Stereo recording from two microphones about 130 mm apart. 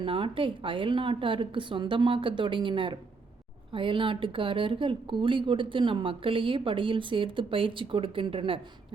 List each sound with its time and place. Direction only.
0.0 s speech: 45° right (ahead or behind)